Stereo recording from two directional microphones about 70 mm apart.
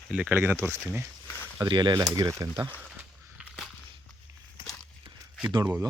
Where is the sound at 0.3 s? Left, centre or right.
Right.